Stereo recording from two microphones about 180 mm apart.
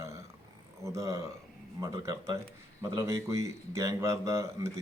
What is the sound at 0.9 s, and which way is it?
Speech, 15° right (ahead or behind).